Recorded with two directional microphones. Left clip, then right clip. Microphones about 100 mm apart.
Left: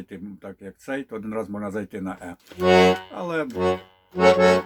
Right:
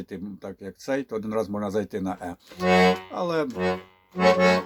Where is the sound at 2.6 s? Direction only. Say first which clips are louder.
Left 3 dB; 15° left (ahead or behind).